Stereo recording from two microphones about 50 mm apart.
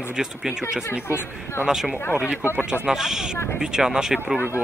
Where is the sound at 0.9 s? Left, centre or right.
Left.